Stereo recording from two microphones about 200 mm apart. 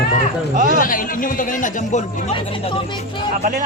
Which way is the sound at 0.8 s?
45° left (ahead or behind).